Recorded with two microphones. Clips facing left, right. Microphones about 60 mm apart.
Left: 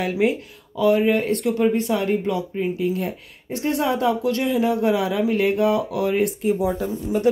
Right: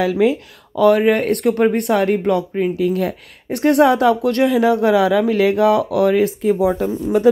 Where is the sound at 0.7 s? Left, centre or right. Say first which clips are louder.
Right 5 dB; right.